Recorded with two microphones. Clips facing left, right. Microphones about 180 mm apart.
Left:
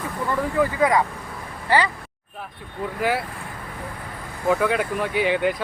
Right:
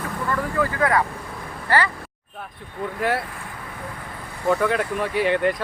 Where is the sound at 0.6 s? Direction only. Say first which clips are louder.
Left 2 dB; 15° left (ahead or behind).